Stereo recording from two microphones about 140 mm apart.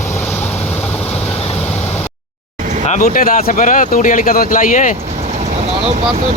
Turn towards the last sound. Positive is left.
turn(degrees=70)  # may be behind; listen again after turning